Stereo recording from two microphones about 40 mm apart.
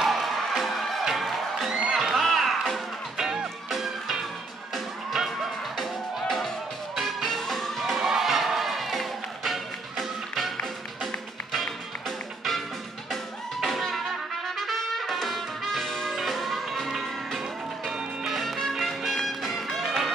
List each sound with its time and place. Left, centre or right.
0.0 s crowd: centre
1.1 s music: centre
1.7 s music: centre
2.0 s music: centre
13.1 s music: centre